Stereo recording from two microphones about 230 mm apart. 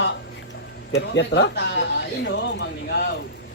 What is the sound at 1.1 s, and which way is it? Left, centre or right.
Speech, left.